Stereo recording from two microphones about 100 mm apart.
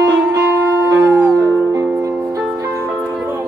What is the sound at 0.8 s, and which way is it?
Music, 25° right (ahead or behind).